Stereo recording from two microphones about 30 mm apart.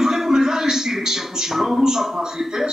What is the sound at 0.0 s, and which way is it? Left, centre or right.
Music, centre.